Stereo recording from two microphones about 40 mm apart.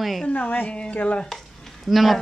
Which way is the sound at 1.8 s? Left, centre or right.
Centre.